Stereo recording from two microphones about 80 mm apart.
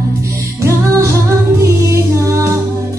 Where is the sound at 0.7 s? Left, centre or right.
Right.